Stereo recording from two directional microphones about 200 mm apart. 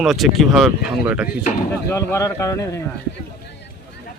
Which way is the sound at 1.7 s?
10° left (ahead or behind).